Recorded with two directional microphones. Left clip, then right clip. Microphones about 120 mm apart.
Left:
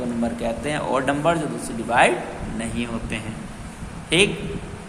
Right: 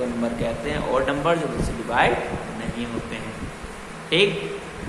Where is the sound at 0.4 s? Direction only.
90° left.